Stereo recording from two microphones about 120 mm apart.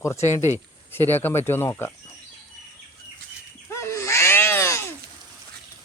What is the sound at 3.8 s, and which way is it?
Baby cry, 25° left (ahead or behind).